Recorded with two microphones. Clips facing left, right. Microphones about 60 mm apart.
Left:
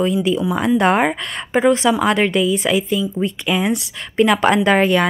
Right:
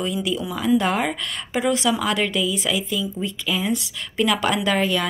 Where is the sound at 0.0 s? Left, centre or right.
Left.